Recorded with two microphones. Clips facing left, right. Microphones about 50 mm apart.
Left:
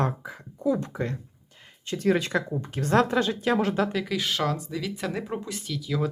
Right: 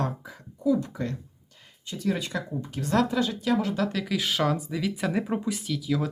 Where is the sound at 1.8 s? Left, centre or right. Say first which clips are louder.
Left 5 dB; left.